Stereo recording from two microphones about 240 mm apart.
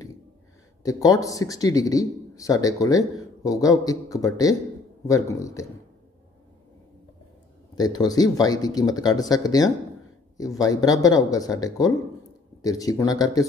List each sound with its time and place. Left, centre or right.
0.8 s speech: centre
7.7 s speech: centre